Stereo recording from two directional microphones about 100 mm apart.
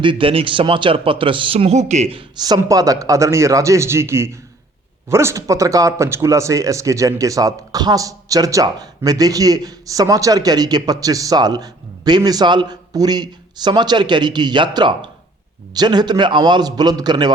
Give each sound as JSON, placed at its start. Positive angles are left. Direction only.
{"t": 0.0, "sound": "a man's voice", "side_deg": -60}
{"t": 2.6, "sound": "a man's voice", "side_deg": -35}